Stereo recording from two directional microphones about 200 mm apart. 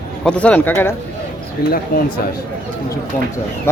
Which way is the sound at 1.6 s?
50° left (ahead or behind).